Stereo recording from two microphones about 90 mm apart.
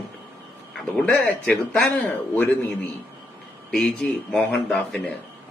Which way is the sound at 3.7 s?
5° left (ahead or behind).